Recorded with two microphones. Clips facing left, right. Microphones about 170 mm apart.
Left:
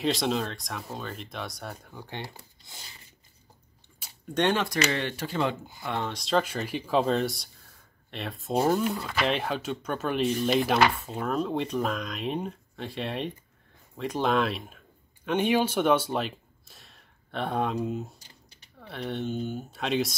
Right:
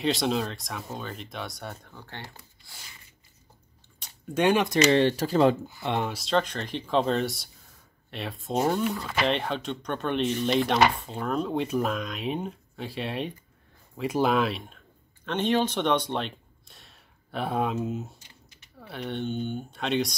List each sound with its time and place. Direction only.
0.0 s speech: centre (ahead or behind)
1.9 s speech: 15° left (ahead or behind)
4.3 s speech: 10° right (ahead or behind)
4.8 s speech: 35° right (ahead or behind)
5.8 s speech: 20° right (ahead or behind)
6.0 s speech: centre (ahead or behind)
15.2 s speech: 10° left (ahead or behind)
18.2 s typing: 35° left (ahead or behind)
18.8 s speech: centre (ahead or behind)